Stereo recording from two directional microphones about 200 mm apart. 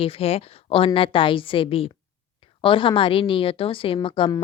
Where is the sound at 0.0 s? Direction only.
30° left (ahead or behind).